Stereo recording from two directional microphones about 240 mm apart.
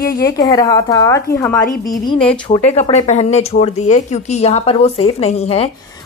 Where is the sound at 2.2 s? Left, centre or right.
Centre.